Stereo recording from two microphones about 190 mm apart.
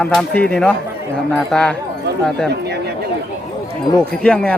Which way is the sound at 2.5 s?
60° right (ahead or behind).